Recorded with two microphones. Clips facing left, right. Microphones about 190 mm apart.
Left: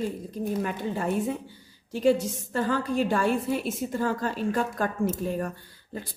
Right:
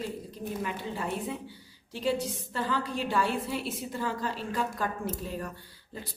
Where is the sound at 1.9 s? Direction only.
45° left (ahead or behind).